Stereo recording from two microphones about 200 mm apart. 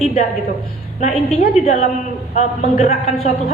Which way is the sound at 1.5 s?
35° left (ahead or behind).